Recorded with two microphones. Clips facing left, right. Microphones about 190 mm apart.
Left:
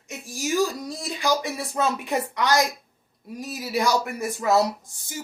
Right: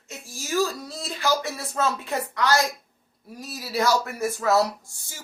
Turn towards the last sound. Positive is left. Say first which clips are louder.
# left 8 dB
turn(degrees=20)  # may be behind; listen again after turning